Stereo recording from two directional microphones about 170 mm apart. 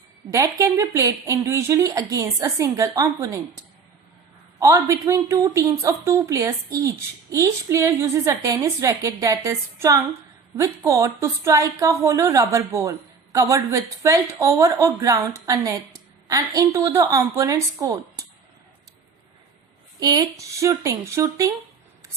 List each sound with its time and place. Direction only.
0.3 s a woman's voice: 20° right (ahead or behind)
4.6 s a woman's voice: 20° right (ahead or behind)
20.0 s a woman's voice: 25° right (ahead or behind)